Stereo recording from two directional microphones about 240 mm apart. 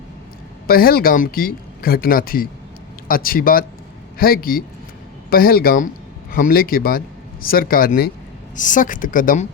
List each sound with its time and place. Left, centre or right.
0.7 s speech: left